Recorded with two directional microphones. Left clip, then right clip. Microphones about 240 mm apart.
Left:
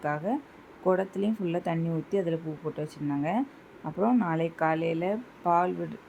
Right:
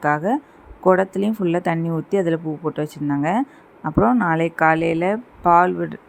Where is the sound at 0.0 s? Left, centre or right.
Right.